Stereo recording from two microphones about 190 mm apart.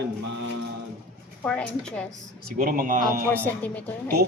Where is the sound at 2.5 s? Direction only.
50° right (ahead or behind).